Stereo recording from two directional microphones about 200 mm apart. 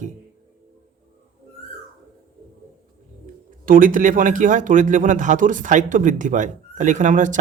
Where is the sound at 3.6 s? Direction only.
45° right (ahead or behind).